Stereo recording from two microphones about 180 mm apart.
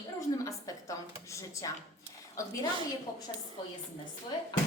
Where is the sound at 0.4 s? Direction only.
20° left (ahead or behind).